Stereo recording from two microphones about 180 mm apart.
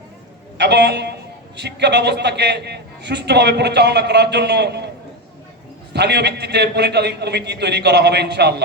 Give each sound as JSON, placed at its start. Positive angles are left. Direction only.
{"t": 0.6, "sound": "a man's voice", "side_deg": -70}
{"t": 5.9, "sound": "a man's voice", "side_deg": -70}